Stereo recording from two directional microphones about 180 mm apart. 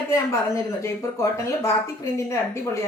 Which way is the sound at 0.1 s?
15° left (ahead or behind).